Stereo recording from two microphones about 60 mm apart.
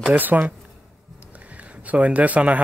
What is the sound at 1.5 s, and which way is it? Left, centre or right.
Speech, right.